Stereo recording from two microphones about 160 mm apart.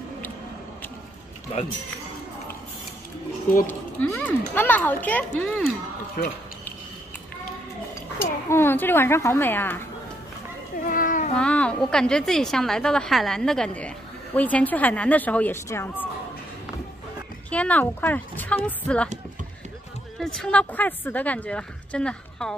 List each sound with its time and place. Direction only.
3.6 s a woman's voice: 10° left (ahead or behind)
6.2 s speech: 65° left (ahead or behind)
8.2 s a woman's voice: 15° left (ahead or behind)
10.9 s a sound: 55° left (ahead or behind)
11.3 s a woman's voice: 5° left (ahead or behind)
17.5 s a woman's voice: 10° left (ahead or behind)
20.2 s a woman's voice: 5° left (ahead or behind)